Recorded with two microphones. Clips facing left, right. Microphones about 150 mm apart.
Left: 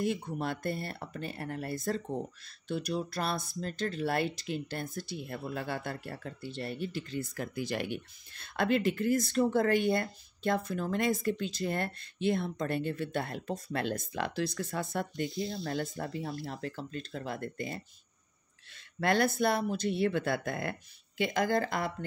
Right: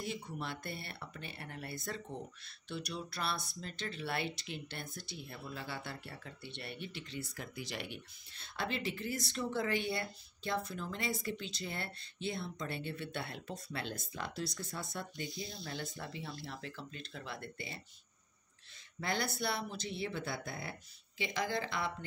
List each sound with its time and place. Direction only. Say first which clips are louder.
0.0 s speech: left 9 dB; 50° left (ahead or behind)
18.9 s speech: left 9 dB; 60° left (ahead or behind)